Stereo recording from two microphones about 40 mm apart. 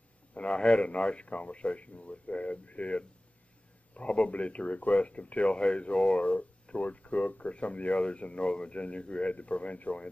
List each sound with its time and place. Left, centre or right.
0.3 s speech: left